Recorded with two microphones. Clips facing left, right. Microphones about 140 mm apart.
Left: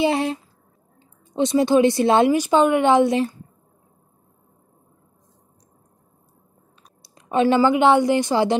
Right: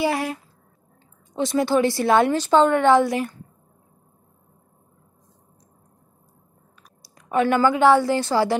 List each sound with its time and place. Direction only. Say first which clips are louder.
0.0 s speech: left 3 dB; 25° left (ahead or behind)
7.0 s a woman's voice: left 2 dB; 25° left (ahead or behind)